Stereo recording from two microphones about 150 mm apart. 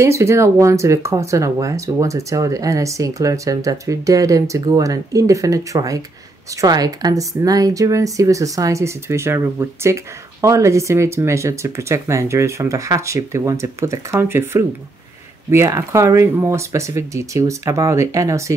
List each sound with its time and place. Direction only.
0.0 s speech: 20° right (ahead or behind)